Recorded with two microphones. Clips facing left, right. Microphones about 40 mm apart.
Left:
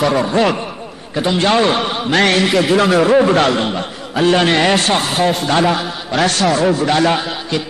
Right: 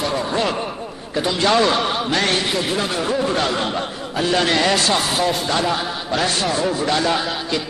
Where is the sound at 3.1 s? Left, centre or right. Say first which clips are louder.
Left 8 dB; left.